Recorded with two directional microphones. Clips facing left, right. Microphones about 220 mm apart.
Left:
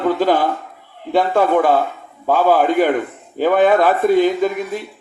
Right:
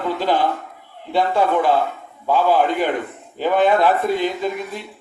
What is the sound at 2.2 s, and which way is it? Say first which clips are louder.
Speech: left 3 dB; 45° left (ahead or behind).